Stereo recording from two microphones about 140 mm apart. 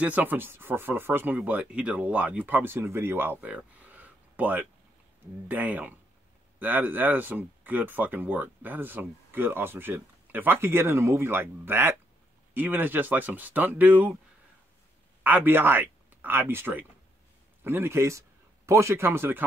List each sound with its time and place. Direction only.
0.0 s speech: 10° right (ahead or behind)
15.2 s speech: 15° right (ahead or behind)